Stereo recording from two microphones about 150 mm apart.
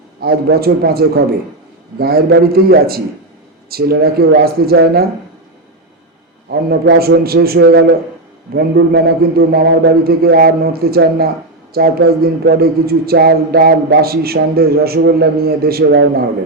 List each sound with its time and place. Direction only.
0.2 s speech: 90° right
6.5 s speech: 90° right